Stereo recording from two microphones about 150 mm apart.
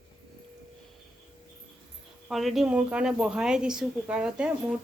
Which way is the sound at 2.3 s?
Centre (ahead or behind).